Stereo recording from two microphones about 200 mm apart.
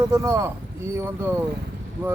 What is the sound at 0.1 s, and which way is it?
A man's voice, 15° right (ahead or behind).